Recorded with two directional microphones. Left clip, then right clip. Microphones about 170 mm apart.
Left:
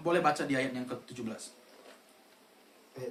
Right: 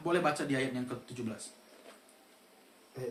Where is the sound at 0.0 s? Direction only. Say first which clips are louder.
Left 2 dB; 25° left (ahead or behind).